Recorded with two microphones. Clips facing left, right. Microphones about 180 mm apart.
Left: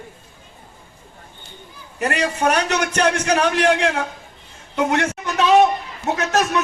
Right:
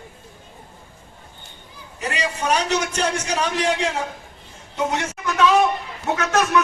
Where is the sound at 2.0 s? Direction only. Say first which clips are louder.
Left 5 dB; 60° left (ahead or behind).